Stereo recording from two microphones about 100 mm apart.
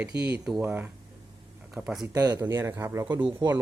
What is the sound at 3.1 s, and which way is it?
Speech, 55° right (ahead or behind).